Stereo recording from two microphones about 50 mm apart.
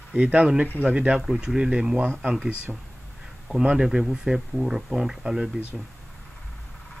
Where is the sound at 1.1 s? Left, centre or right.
Centre.